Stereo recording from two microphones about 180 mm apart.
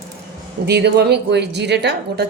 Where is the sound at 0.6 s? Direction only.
65° right (ahead or behind).